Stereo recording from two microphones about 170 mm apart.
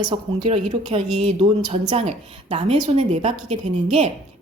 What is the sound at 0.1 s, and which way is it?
Speech, 35° right (ahead or behind).